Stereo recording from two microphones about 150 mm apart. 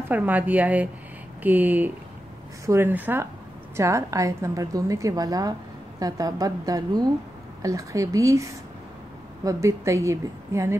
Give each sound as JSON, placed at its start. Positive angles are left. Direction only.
{"t": 0.1, "sound": "a woman's voice", "side_deg": -10}